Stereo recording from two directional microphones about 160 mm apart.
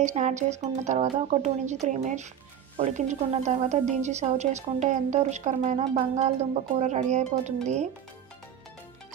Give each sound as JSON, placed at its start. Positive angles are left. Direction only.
{"t": 0.0, "sound": "a woman's voice", "side_deg": -50}